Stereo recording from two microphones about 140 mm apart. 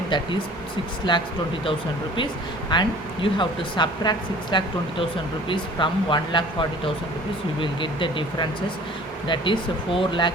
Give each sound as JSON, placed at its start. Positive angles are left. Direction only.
{"t": 1.1, "sound": "speech", "side_deg": 35}